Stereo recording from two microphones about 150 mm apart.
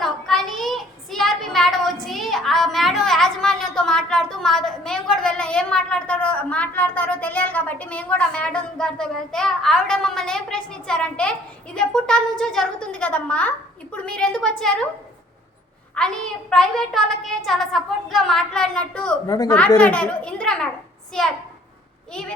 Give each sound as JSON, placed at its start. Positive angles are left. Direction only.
{"t": 0.0, "sound": "child singing", "side_deg": 0}
{"t": 13.9, "sound": "a woman's voice", "side_deg": 5}
{"t": 16.0, "sound": "a child's voice", "side_deg": 5}
{"t": 19.3, "sound": "a woman's voice", "side_deg": 25}
{"t": 19.5, "sound": "a child's voice", "side_deg": 10}